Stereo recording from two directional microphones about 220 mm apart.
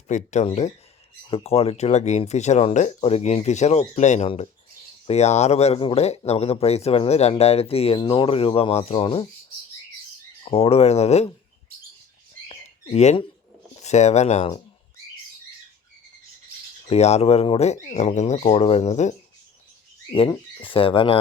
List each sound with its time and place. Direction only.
0.1 s speech: 35° left (ahead or behind)
10.4 s speech: 25° left (ahead or behind)
12.5 s bird: 30° left (ahead or behind)
13.7 s speech: 30° left (ahead or behind)
16.9 s speech: 30° left (ahead or behind)
20.6 s speech: 25° left (ahead or behind)